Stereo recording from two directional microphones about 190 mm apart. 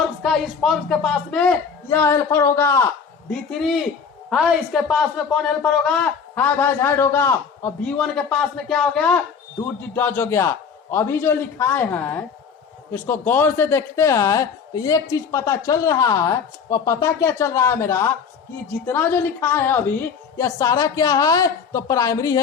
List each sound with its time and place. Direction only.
0.2 s speech: centre (ahead or behind)
3.2 s a man's voice: centre (ahead or behind); by 22.4 s 15° left (ahead or behind)